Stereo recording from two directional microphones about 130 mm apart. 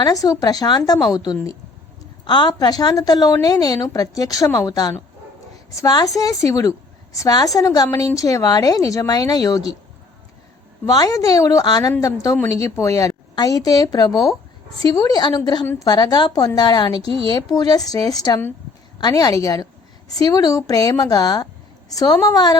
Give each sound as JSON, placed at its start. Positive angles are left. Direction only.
{"t": 0.0, "sound": "a woman's voice", "side_deg": 25}
{"t": 10.8, "sound": "a woman's voice", "side_deg": 30}